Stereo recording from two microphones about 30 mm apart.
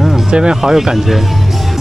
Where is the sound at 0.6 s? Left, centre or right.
Centre.